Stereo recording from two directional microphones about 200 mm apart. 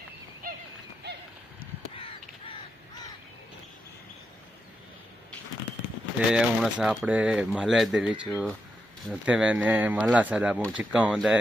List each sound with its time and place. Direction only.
0.4 s horse: 45° right (ahead or behind)
6.1 s speech: 5° right (ahead or behind)